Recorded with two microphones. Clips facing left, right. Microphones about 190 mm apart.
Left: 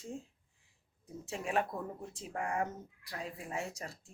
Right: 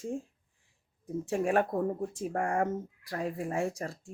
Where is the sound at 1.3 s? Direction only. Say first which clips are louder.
Right 7 dB; 50° right (ahead or behind).